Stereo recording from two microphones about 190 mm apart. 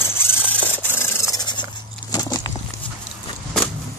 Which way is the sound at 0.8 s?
15° left (ahead or behind).